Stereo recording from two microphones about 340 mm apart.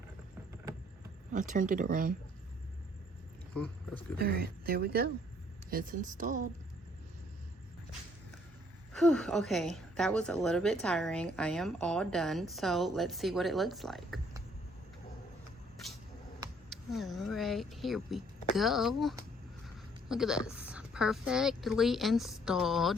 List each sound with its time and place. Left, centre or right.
1.3 s speech: right
3.5 s speech: centre
4.2 s speech: right
9.0 s speech: centre
16.6 s a woman's voice: centre